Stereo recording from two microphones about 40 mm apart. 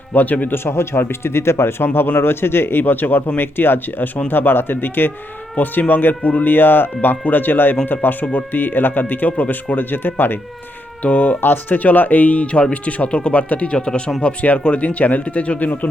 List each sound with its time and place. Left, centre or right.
0.1 s speech: left
0.5 s speech: left
5.6 s speech: left
11.0 s speech: left
11.3 s speech: left